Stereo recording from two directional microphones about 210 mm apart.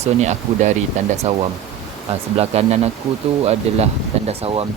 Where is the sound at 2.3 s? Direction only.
30° right (ahead or behind).